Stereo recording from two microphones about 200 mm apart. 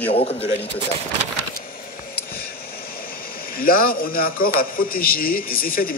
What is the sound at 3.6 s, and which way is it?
A man's voice, 45° left (ahead or behind).